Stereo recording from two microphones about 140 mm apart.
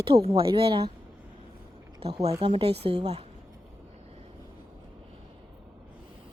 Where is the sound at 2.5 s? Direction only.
40° right (ahead or behind).